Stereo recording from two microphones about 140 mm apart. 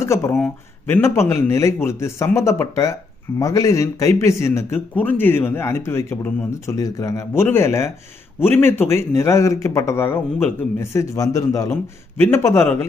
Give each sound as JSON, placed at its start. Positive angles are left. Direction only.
{"t": 0.0, "sound": "speech", "side_deg": 20}